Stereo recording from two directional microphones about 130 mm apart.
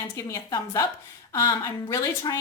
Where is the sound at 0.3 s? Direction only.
25° left (ahead or behind).